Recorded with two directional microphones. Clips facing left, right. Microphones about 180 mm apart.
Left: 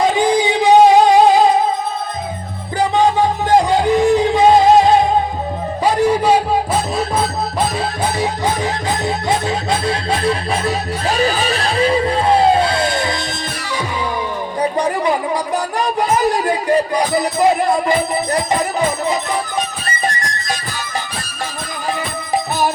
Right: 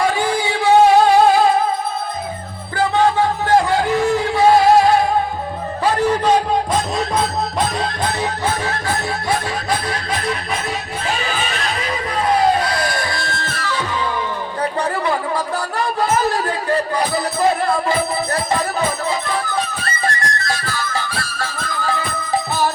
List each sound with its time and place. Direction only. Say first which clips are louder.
0.0 s music: left 4 dB; 20° left (ahead or behind)
2.7 s music: left 1 dB; 15° left (ahead or behind)
7.8 s music: left 2 dB; 15° left (ahead or behind)
14.6 s a sound: left 4 dB; 15° left (ahead or behind)
19.8 s music: even; 15° left (ahead or behind)